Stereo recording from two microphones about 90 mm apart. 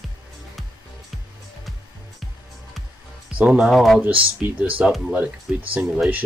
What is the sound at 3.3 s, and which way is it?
Speech, 10° right (ahead or behind).